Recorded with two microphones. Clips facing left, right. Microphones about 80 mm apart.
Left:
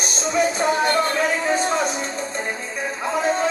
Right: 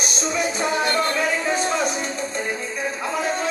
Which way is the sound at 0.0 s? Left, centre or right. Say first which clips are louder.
Left 3 dB; left.